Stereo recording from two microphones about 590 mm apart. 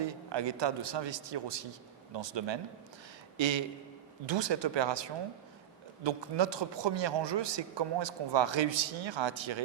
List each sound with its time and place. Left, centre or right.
0.0 s a man's voice: right